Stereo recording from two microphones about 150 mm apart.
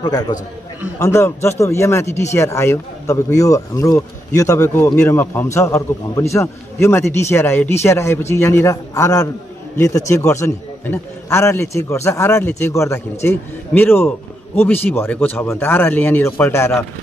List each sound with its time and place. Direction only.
0.0 s a man's voice: 25° left (ahead or behind)